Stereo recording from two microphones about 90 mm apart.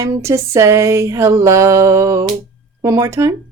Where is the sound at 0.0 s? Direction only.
30° right (ahead or behind).